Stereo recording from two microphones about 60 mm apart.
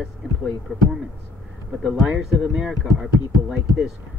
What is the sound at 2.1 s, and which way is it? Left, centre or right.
Speech, centre.